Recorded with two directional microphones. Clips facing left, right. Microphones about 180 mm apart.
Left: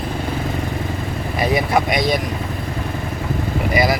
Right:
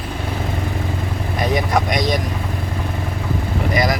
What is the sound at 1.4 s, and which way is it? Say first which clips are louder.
Vehicle: left 1 dB; 5° left (ahead or behind).